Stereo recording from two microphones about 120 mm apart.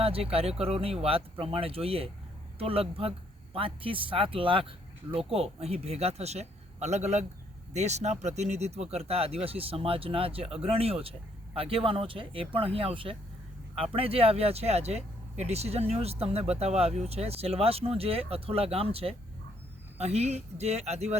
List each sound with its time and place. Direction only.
0.0 s speech: 55° right (ahead or behind)